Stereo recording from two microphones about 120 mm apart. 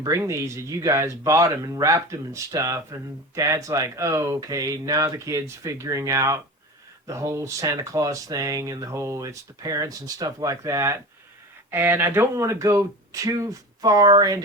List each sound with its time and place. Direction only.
0.0 s speech: 25° right (ahead or behind)